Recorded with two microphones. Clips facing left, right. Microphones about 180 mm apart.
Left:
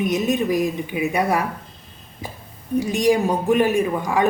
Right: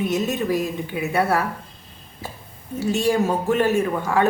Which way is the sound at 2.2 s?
15° left (ahead or behind).